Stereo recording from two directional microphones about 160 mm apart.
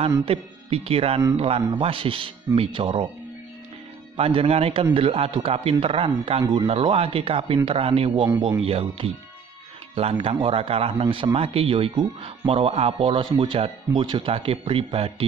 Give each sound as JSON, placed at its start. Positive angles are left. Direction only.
{"t": 0.2, "sound": "speech", "side_deg": -35}
{"t": 4.2, "sound": "speech", "side_deg": -35}